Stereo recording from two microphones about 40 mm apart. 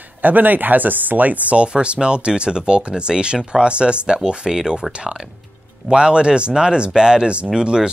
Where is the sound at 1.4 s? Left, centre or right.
Right.